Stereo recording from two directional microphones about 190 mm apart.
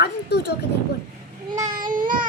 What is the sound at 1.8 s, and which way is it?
Speech, 45° right (ahead or behind).